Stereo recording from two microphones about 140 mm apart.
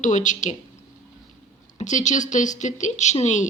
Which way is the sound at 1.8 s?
60° left (ahead or behind).